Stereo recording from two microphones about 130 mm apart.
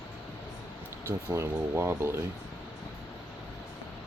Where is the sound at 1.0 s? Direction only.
20° right (ahead or behind).